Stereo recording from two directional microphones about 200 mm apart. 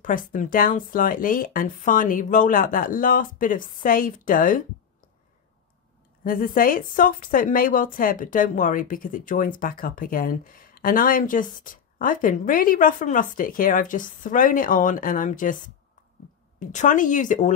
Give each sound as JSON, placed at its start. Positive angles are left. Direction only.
{"t": 0.0, "sound": "a woman's voice", "side_deg": 40}
{"t": 6.2, "sound": "a woman's voice", "side_deg": 45}
{"t": 16.5, "sound": "speech", "side_deg": 40}